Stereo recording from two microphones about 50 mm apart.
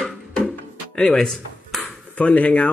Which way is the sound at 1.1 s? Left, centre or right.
Centre.